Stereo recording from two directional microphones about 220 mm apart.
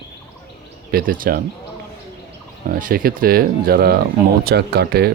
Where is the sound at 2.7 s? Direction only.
40° right (ahead or behind).